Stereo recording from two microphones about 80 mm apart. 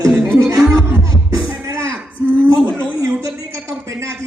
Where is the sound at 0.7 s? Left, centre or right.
Right.